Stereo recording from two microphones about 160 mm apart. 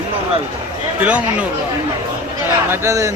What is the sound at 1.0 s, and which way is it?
Speech, 10° right (ahead or behind).